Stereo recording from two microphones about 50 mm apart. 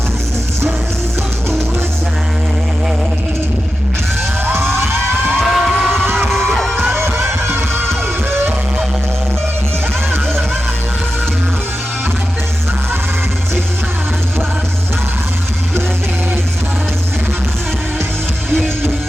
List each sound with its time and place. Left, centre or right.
5.4 s music: centre
5.9 s music: right
6.6 s music: centre
7.0 s music: right